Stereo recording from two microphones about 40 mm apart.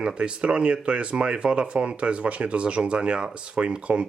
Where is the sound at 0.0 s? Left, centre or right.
Right.